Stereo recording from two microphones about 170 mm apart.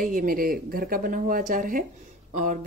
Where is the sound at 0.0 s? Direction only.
55° right (ahead or behind).